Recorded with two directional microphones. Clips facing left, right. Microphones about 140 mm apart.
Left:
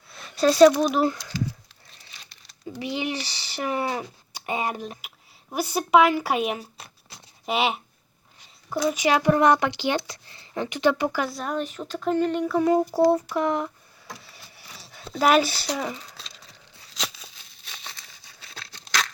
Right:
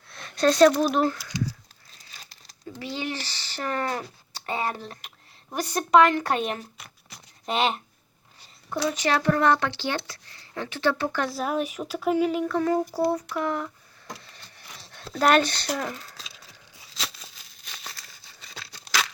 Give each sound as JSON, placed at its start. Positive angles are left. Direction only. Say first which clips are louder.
{"t": 0.1, "sound": "speech", "louder": "left 1 dB", "side_deg": 5}
{"t": 2.7, "sound": "speech", "louder": "left 3 dB", "side_deg": 15}
{"t": 8.8, "sound": "speech", "louder": "left 3 dB", "side_deg": 10}
{"t": 12.5, "sound": "speech", "louder": "left 6 dB", "side_deg": 15}
{"t": 14.1, "sound": "a sound", "louder": "right 1 dB", "side_deg": 5}